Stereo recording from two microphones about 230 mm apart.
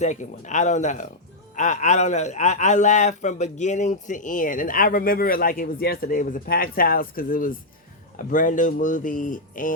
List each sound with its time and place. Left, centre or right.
0.0 s a man's voice: left